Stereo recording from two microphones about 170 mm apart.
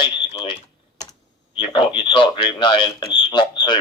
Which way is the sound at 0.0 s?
25° left (ahead or behind).